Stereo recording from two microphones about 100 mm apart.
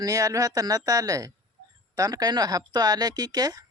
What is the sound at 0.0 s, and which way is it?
Speech, 35° right (ahead or behind).